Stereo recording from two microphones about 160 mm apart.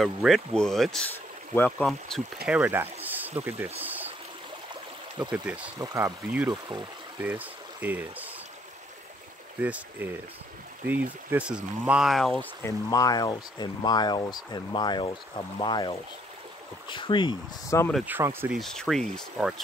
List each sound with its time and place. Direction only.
0.0 s speech: centre (ahead or behind)
1.1 s a sound: 15° left (ahead or behind)
2.4 s speech: 10° right (ahead or behind)
5.3 s speech: 10° right (ahead or behind)
5.8 s speech: 20° right (ahead or behind)
7.2 s speech: 10° right (ahead or behind)
9.6 s speech: 10° right (ahead or behind)
12.6 s speech: 25° left (ahead or behind)
18.0 s speech: 15° right (ahead or behind)
18.6 s speech: centre (ahead or behind)